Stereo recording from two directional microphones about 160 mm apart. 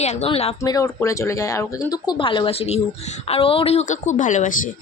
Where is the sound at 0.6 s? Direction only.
20° left (ahead or behind); by 4.5 s 50° left (ahead or behind).